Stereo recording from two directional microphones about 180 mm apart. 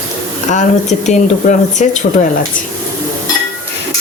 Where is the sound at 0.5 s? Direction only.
40° left (ahead or behind).